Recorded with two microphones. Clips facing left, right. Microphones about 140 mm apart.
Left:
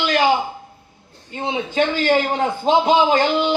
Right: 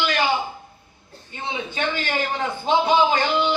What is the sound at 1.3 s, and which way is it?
A man's voice, 45° left (ahead or behind).